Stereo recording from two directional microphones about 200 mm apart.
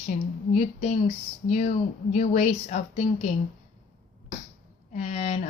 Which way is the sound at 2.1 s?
35° left (ahead or behind).